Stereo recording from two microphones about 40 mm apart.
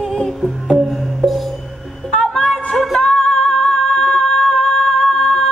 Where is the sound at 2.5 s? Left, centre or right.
Centre.